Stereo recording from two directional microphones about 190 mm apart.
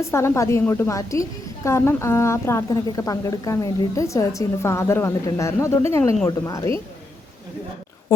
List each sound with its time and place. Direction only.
0.0 s a woman's voice: 15° left (ahead or behind)